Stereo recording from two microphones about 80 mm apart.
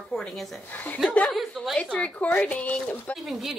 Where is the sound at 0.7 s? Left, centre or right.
Left.